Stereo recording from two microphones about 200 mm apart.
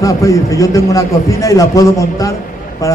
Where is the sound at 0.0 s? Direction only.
15° left (ahead or behind).